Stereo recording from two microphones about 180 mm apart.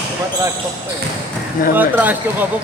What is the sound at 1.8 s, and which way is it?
Speech, 10° right (ahead or behind).